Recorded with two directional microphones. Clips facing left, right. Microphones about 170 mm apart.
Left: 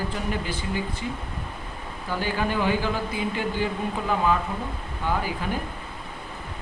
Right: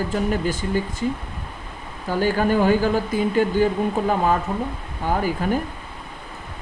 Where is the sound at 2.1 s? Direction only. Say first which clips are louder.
Right 7 dB; 45° right (ahead or behind).